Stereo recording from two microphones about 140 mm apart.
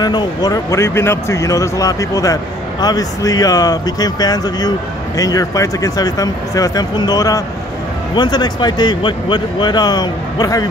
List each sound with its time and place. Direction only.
0.0 s speech: 30° left (ahead or behind)